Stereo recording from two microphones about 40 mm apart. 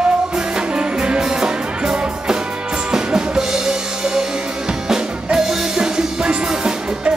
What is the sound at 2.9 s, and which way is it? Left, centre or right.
Drum kit, centre.